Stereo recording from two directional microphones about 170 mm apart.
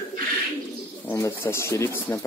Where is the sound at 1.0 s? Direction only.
15° left (ahead or behind).